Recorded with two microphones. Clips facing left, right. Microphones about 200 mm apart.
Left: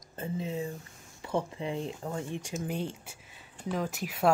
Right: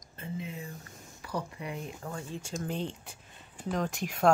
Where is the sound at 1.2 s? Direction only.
25° left (ahead or behind).